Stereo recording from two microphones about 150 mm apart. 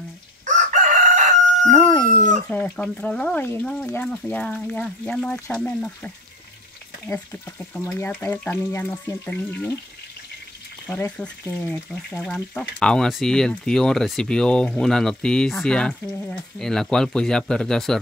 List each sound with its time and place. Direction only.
0.5 s chicken: 55° right (ahead or behind)
1.7 s dog: 10° left (ahead or behind)
2.4 s speech: 10° left (ahead or behind)
10.9 s speech: 10° left (ahead or behind)